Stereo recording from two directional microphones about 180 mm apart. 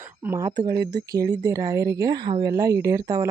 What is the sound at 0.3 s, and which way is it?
A woman's voice, 15° right (ahead or behind).